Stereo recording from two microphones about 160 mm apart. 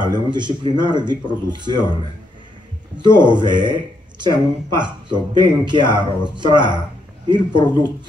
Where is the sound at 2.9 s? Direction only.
30° right (ahead or behind).